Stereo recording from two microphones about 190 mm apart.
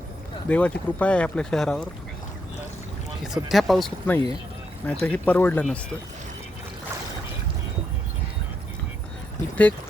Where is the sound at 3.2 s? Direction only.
Centre (ahead or behind).